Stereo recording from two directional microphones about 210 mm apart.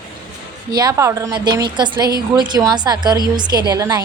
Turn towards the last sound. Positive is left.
turn(degrees=-20)  # may be behind; listen again after turning